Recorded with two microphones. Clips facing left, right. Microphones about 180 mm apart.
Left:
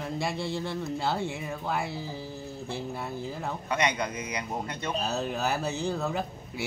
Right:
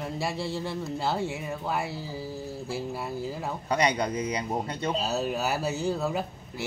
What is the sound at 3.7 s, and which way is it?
Speech, 35° right (ahead or behind).